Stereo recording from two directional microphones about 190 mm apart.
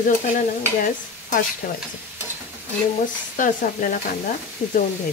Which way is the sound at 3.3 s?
45° left (ahead or behind).